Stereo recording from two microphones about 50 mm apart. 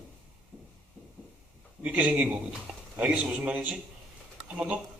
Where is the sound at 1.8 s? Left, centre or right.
Right.